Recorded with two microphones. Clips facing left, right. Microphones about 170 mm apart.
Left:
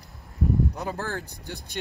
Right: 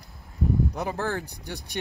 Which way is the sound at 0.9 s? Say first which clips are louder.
Right 3 dB; 15° right (ahead or behind).